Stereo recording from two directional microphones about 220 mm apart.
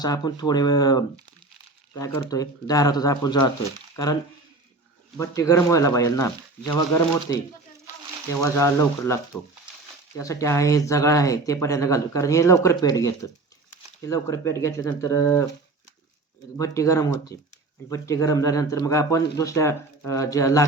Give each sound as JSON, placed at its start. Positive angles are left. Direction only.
{"t": 0.0, "sound": "speech", "side_deg": 15}
{"t": 8.3, "sound": "speech", "side_deg": 15}
{"t": 16.6, "sound": "speech", "side_deg": 15}